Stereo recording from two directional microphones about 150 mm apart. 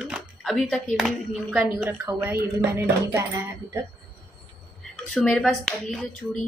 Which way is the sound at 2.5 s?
20° right (ahead or behind).